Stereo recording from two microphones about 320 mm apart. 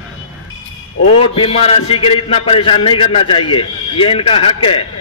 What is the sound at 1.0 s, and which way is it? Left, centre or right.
A man's voice, centre.